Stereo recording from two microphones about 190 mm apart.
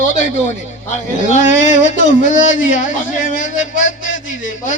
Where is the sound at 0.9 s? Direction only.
40° left (ahead or behind).